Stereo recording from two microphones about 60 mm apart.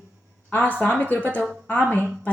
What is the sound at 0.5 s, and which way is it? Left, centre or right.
A woman's voice, left.